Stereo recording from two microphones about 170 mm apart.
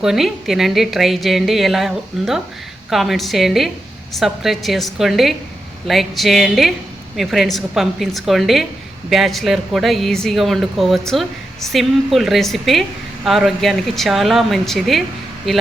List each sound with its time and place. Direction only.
0.0 s a woman's voice: centre (ahead or behind)